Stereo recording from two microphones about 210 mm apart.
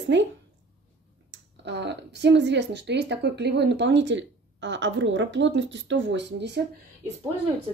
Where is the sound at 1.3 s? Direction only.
55° right (ahead or behind).